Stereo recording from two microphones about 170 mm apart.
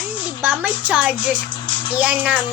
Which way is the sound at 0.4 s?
10° right (ahead or behind).